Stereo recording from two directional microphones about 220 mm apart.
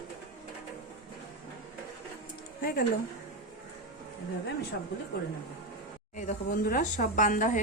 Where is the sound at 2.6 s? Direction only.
40° left (ahead or behind).